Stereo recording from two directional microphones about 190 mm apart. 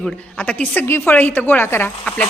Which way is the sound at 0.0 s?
5° left (ahead or behind).